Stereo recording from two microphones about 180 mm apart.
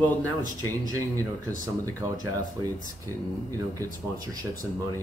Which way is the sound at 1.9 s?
20° right (ahead or behind).